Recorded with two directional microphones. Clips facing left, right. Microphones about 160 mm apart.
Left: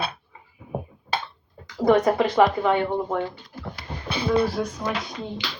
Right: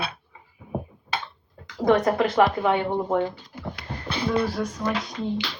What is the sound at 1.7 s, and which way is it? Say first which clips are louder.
Speech: left 1 dB; 5° left (ahead or behind).